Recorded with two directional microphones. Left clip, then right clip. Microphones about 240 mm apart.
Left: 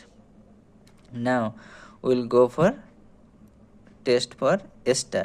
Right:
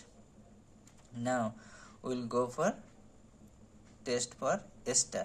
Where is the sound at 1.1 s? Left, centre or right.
Left.